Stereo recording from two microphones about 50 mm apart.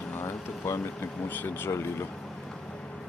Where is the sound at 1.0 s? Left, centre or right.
Left.